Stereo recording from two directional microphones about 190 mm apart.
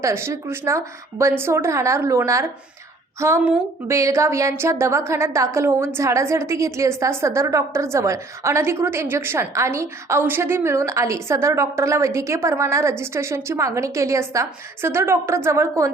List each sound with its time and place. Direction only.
0.0 s a woman's voice: 15° right (ahead or behind)